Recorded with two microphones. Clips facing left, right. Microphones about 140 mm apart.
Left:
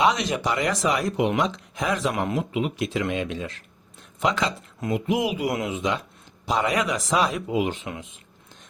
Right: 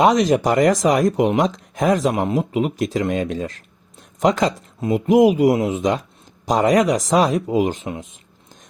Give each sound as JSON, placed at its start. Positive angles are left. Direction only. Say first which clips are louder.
{"t": 0.0, "sound": "speech", "louder": "right 7 dB", "side_deg": -45}
{"t": 2.1, "sound": "speech", "louder": "right 5 dB", "side_deg": -25}
{"t": 2.4, "sound": "speech", "louder": "right 5 dB", "side_deg": -40}